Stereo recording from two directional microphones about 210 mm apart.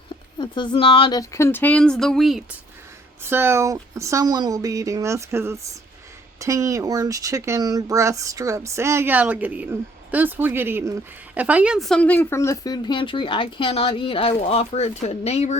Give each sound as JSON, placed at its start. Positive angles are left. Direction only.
{"t": 0.3, "sound": "speech", "side_deg": 20}
{"t": 3.2, "sound": "speech", "side_deg": -10}